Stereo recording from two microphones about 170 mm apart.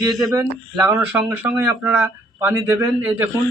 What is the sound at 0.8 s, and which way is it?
Speech, 15° right (ahead or behind).